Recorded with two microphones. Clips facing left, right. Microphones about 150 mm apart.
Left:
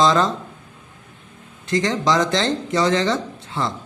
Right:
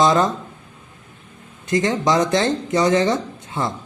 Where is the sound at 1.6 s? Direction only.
20° right (ahead or behind).